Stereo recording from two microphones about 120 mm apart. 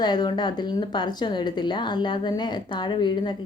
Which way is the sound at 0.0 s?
35° left (ahead or behind).